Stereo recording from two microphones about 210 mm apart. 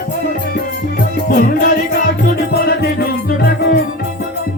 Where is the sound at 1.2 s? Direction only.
40° left (ahead or behind).